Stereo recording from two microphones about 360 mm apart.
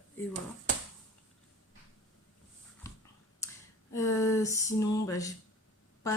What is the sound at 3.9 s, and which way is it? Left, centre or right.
Speech, centre.